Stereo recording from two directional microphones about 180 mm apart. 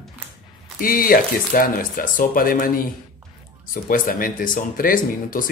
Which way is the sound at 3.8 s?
50° left (ahead or behind).